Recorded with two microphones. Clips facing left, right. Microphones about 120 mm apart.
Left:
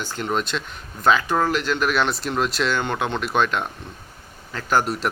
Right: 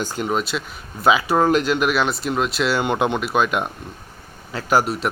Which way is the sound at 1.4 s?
20° right (ahead or behind).